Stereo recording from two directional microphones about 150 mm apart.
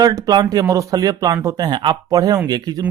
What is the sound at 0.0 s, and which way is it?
Speech, 25° right (ahead or behind).